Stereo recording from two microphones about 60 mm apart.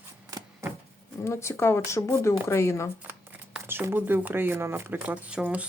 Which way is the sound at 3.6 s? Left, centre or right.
Right.